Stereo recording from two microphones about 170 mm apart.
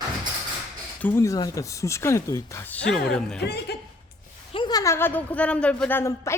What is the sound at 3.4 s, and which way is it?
Speech, 75° left (ahead or behind).